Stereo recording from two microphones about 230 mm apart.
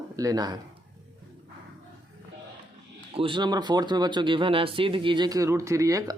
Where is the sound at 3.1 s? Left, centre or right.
Right.